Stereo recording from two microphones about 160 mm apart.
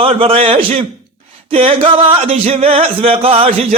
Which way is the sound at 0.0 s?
35° right (ahead or behind).